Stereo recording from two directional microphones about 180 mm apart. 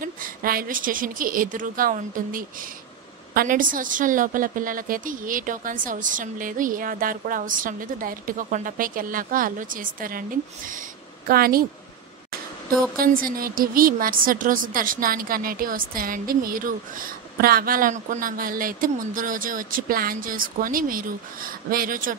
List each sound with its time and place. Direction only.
0.0 s a woman's voice: 50° right (ahead or behind)
12.9 s a woman's voice: 55° right (ahead or behind)